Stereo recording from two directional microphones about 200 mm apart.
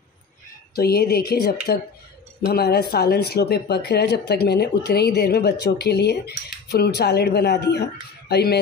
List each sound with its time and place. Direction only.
0.7 s speech: 50° left (ahead or behind)